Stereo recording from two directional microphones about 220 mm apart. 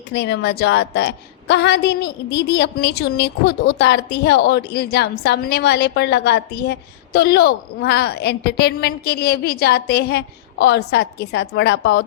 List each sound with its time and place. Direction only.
0.1 s a woman's voice: 50° left (ahead or behind)